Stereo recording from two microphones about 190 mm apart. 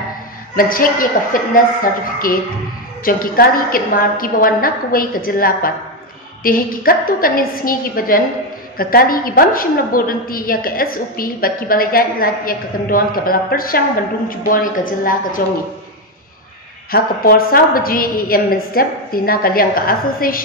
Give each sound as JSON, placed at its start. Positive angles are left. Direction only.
{"t": 0.6, "sound": "a woman's voice", "side_deg": 50}
{"t": 16.9, "sound": "a woman's voice", "side_deg": 50}